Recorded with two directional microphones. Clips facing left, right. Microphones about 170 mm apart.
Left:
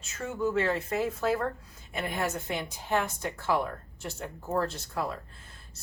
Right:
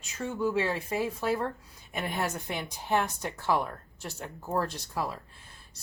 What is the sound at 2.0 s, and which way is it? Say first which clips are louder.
Speech: left 1 dB; 15° right (ahead or behind).